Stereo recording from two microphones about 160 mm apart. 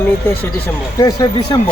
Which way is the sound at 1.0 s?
25° left (ahead or behind).